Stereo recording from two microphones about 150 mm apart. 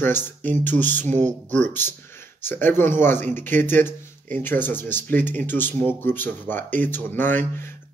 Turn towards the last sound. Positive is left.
turn(degrees=10)  # may be behind; listen again after turning